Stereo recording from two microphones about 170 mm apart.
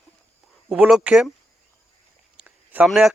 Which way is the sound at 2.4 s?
5° right (ahead or behind).